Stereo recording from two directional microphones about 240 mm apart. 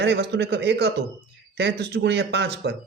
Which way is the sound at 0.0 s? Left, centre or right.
Right.